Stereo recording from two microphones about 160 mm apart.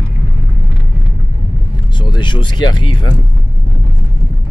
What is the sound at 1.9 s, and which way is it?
Speech, 30° left (ahead or behind).